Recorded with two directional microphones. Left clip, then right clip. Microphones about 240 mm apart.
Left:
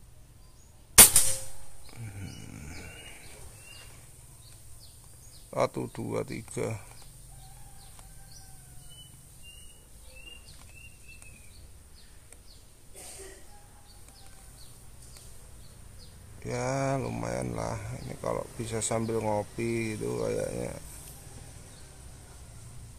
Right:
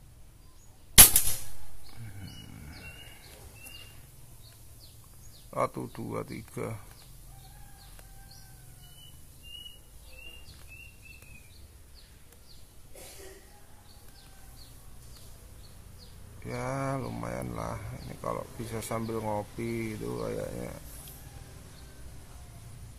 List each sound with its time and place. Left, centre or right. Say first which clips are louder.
2.1 s a sound: left 2 dB; left
5.5 s speech: left 2 dB; left
16.4 s mantra: left 3 dB; left
17.7 s a sound: left 3 dB; left
18.2 s speech: left 2 dB; left
20.1 s speech: left 5 dB; left